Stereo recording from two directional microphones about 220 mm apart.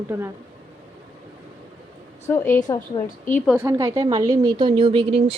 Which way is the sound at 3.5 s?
15° right (ahead or behind).